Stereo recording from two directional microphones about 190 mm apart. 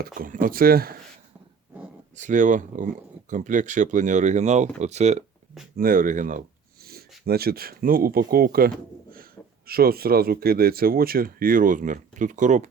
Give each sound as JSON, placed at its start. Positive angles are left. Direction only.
{"t": 0.2, "sound": "speech", "side_deg": -45}
{"t": 2.1, "sound": "speech", "side_deg": -40}
{"t": 5.7, "sound": "speech", "side_deg": -50}